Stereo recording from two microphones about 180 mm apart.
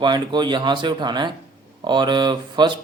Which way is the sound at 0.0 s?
25° right (ahead or behind).